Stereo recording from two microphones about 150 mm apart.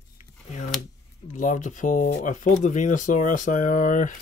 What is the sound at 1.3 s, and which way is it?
Speech, 55° left (ahead or behind).